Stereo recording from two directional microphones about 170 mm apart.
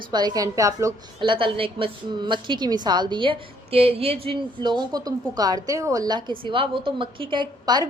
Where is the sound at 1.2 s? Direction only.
30° right (ahead or behind).